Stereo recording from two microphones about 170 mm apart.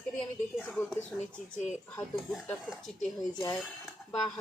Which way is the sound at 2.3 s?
5° left (ahead or behind).